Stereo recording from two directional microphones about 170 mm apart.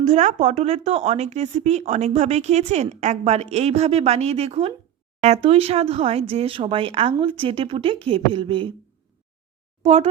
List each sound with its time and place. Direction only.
0.0 s speech: 45° right (ahead or behind)
9.8 s speech: 40° right (ahead or behind)